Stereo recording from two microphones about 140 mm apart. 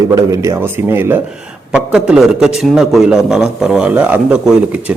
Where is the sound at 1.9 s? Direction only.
5° right (ahead or behind).